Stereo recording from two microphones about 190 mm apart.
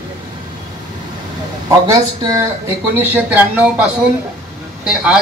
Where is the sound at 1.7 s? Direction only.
20° right (ahead or behind).